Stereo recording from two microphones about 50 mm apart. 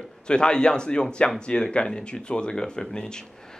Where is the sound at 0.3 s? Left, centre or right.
Centre.